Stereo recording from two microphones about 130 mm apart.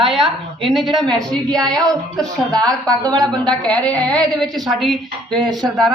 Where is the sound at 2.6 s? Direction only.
30° right (ahead or behind).